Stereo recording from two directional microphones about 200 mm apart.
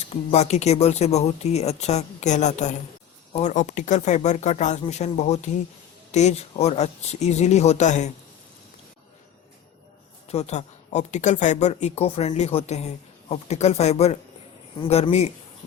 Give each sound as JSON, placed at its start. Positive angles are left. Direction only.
{"t": 0.3, "sound": "speech", "side_deg": 35}
{"t": 10.2, "sound": "speech", "side_deg": 35}